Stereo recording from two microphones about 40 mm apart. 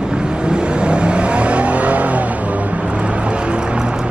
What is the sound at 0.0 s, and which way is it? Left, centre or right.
Vehicle, right.